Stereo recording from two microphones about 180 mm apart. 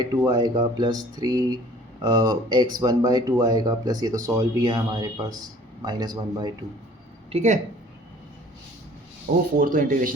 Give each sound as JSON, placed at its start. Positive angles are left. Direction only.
{"t": 0.3, "sound": "a man's voice", "side_deg": -25}
{"t": 7.3, "sound": "speech", "side_deg": -40}
{"t": 9.6, "sound": "speech", "side_deg": -50}